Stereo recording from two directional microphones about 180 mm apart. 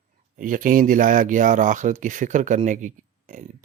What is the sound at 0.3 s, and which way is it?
Speech, 45° right (ahead or behind).